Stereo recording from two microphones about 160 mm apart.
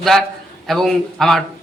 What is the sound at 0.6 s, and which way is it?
Speech, centre (ahead or behind).